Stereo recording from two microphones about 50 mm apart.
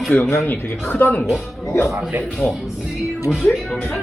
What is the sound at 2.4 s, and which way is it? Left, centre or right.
Speech, left.